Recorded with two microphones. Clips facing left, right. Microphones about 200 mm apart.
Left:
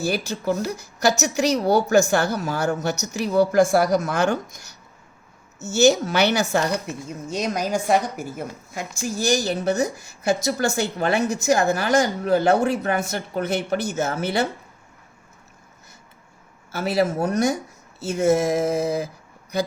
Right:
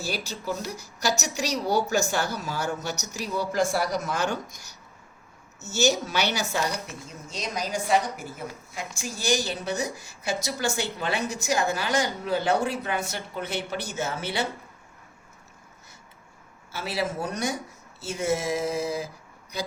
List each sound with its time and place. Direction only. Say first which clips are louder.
0.0 s a woman's voice: left 8 dB; 55° left (ahead or behind)
5.6 s a woman's voice: left 7 dB; 50° left (ahead or behind)
16.7 s a woman's voice: left 8 dB; 45° left (ahead or behind)